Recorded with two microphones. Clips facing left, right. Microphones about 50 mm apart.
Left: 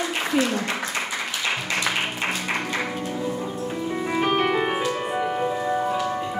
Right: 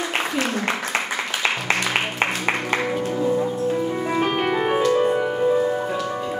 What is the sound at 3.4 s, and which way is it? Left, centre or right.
Music, centre.